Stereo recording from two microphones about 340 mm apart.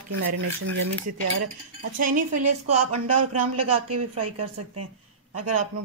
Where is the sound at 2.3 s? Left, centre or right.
Right.